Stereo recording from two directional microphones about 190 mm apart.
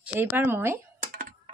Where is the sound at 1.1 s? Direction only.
50° right (ahead or behind).